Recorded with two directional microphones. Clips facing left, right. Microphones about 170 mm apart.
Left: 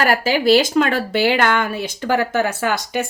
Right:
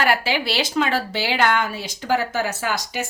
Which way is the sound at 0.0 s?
45° left (ahead or behind).